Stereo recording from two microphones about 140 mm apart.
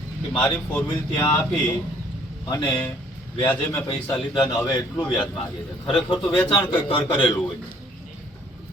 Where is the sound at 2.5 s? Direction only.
30° left (ahead or behind).